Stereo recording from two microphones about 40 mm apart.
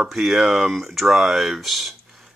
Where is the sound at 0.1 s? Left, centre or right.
Centre.